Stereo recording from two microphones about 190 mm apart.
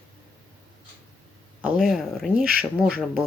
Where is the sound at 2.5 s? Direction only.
55° right (ahead or behind).